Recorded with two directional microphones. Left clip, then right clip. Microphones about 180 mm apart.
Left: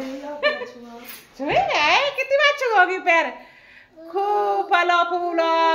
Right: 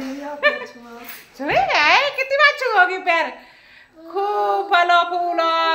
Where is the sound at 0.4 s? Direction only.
10° left (ahead or behind).